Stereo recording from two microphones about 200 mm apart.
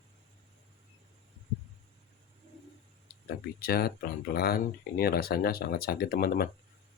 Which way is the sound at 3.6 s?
50° left (ahead or behind).